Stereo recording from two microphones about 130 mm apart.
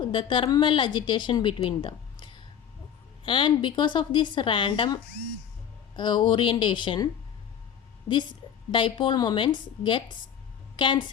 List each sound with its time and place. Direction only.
0.0 s a woman's voice: 40° left (ahead or behind)
6.0 s a woman's voice: 35° left (ahead or behind)